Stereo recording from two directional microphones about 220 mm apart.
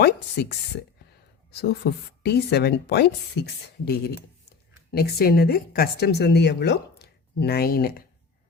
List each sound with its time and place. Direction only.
0.0 s a woman's voice: 45° left (ahead or behind)